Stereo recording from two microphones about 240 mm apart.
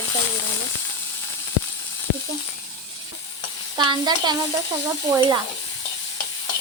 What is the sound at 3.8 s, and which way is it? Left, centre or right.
A woman's voice, centre.